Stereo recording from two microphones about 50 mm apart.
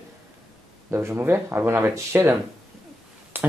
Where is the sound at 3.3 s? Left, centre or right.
Right.